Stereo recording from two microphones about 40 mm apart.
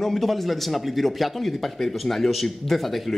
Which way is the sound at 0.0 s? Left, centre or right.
Centre.